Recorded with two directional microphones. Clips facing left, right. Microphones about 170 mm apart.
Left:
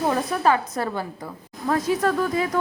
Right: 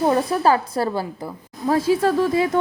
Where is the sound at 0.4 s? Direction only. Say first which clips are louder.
Right 3 dB; 35° right (ahead or behind).